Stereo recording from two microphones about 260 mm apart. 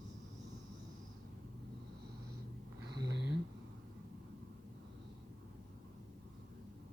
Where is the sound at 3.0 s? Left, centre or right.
Right.